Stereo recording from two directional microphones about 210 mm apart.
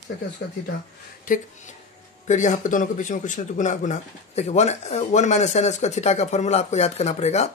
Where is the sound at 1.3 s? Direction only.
40° left (ahead or behind).